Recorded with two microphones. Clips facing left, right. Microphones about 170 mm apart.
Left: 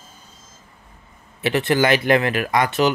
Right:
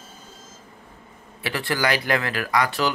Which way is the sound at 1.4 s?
20° left (ahead or behind).